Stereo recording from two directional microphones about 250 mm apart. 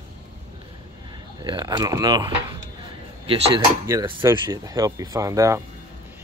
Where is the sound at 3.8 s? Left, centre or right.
Centre.